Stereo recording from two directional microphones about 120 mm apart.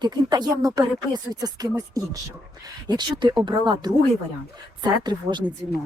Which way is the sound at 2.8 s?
35° right (ahead or behind).